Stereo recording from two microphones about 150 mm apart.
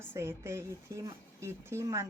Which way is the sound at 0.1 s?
20° right (ahead or behind).